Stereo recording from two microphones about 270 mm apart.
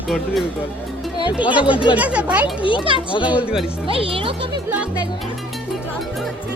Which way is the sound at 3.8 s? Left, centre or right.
Centre.